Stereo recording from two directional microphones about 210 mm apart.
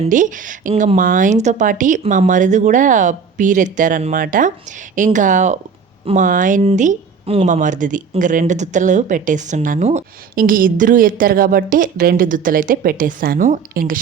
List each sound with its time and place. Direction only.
0.0 s speech: 40° right (ahead or behind)